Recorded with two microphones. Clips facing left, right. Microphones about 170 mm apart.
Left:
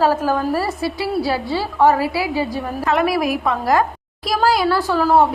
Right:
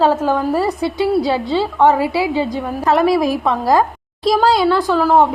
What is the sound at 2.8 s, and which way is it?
A woman's voice, 35° right (ahead or behind).